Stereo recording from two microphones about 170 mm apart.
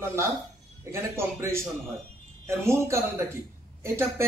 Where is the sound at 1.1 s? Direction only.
15° right (ahead or behind).